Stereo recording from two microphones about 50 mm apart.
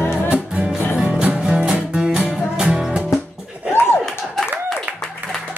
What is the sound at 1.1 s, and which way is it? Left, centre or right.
Music, centre.